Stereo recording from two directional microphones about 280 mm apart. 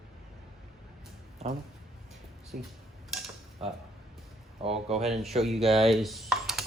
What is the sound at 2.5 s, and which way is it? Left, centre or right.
Speech, right.